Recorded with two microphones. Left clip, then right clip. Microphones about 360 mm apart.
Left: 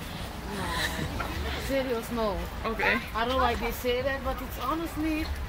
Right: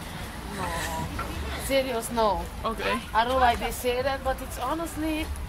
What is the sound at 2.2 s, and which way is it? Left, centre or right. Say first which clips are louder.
Speech: right 7 dB; right.